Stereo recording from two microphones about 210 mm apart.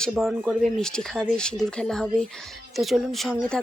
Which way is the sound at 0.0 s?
Centre (ahead or behind).